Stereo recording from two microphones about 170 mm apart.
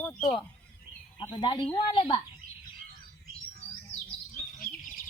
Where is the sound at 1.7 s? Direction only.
30° left (ahead or behind).